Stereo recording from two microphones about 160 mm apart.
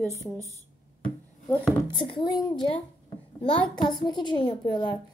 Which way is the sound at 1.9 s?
30° left (ahead or behind).